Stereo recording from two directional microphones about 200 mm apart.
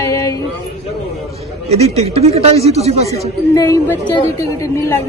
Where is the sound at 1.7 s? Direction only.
30° right (ahead or behind).